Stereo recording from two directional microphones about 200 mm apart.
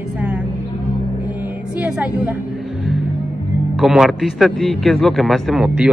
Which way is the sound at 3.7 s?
Centre (ahead or behind).